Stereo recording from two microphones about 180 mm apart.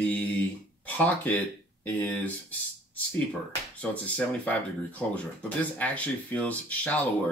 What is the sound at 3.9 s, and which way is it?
Speech, 10° left (ahead or behind).